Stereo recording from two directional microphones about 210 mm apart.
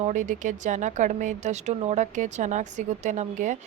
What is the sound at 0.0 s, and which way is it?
Speech, 35° right (ahead or behind).